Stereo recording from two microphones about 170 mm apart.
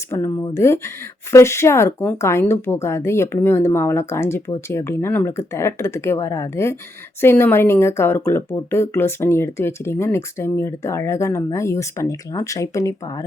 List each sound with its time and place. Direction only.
0.1 s speech: 15° left (ahead or behind)